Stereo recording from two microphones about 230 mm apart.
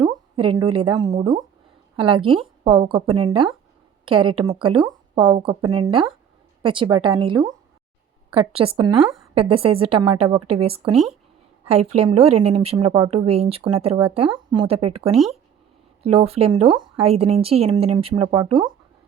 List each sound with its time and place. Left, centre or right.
0.0 s a woman's voice: centre
14.8 s speech: right
15.1 s speech: centre
16.1 s speech: right